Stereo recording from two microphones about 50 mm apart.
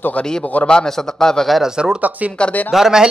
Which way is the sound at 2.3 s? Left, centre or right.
Left.